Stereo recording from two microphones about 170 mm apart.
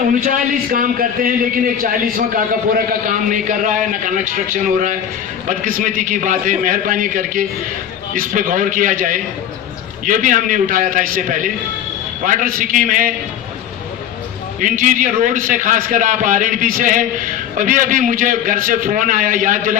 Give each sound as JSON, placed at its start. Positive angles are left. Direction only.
{"t": 0.3, "sound": "a man's voice", "side_deg": -55}
{"t": 14.6, "sound": "a man's voice", "side_deg": -50}